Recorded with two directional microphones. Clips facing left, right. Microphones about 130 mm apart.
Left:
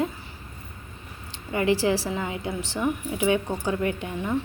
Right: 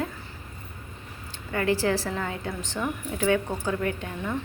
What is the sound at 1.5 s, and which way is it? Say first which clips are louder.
A woman's voice: left 2 dB; 15° left (ahead or behind).